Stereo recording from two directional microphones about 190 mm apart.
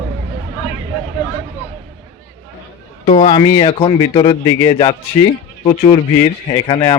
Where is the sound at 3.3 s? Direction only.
25° left (ahead or behind).